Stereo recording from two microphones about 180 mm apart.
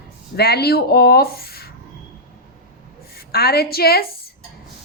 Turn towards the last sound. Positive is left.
turn(degrees=60)  # may be behind; listen again after turning